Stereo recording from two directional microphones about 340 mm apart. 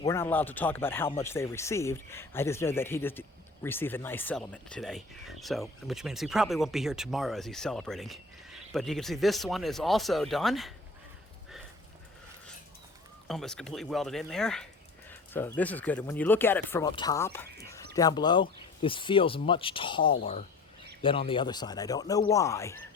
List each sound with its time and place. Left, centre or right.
0.0 s speech: centre
13.2 s speech: centre